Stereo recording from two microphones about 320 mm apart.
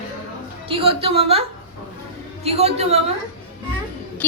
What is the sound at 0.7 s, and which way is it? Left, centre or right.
A woman's voice, centre.